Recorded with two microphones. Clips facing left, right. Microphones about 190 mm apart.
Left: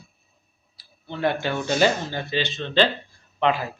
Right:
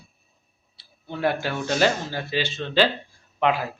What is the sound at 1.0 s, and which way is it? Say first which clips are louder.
Speech: even; 10° right (ahead or behind).